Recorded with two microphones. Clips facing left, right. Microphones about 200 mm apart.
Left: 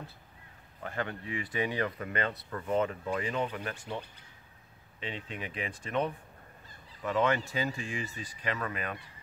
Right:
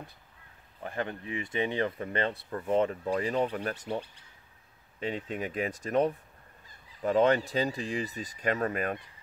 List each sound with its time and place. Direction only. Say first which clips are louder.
0.8 s speech: right 2 dB; 20° right (ahead or behind); by 4.0 s 40° right (ahead or behind)
5.0 s speech: right 6 dB; 45° right (ahead or behind)